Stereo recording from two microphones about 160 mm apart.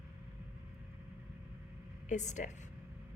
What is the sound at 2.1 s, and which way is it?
Speech, 50° left (ahead or behind).